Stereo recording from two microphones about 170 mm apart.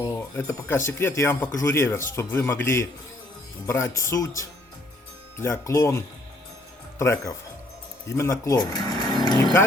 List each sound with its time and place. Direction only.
0.0 s speech: 15° left (ahead or behind)
7.0 s speech: 15° left (ahead or behind)